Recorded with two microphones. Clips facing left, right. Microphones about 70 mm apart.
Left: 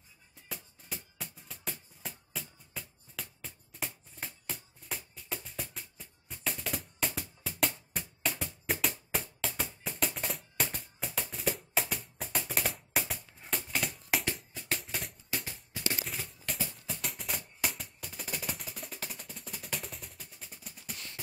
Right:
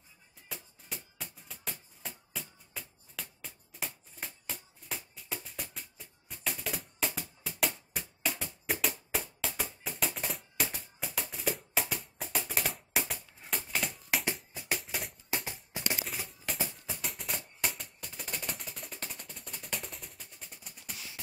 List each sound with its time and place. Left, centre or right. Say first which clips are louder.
0.5 s music: left 1 dB; centre
14.2 s music: right 1 dB; centre
14.8 s music: right 1 dB; centre
15.2 s music: right 2 dB; right
16.0 s music: even; centre